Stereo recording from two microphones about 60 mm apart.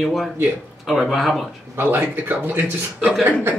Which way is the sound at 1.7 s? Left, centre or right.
Right.